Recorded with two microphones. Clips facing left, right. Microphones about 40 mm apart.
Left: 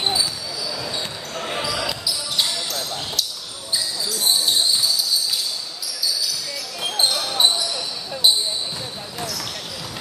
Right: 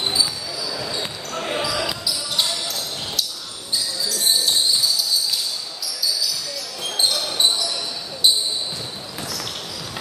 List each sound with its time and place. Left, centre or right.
1.3 s basketball bounce: centre
7.0 s basketball bounce: centre